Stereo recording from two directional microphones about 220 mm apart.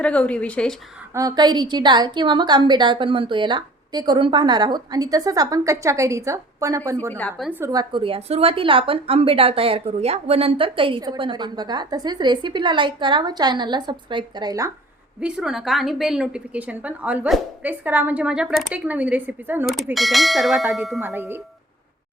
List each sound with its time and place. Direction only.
0.0 s a woman's voice: 5° left (ahead or behind)
1.1 s a woman's voice: 15° right (ahead or behind)
7.1 s a woman's voice: 5° left (ahead or behind)
7.6 s a woman's voice: 15° right (ahead or behind)
15.2 s a woman's voice: centre (ahead or behind)